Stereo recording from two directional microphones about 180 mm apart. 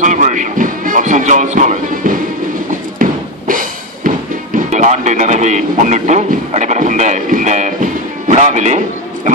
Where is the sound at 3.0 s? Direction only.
50° right (ahead or behind).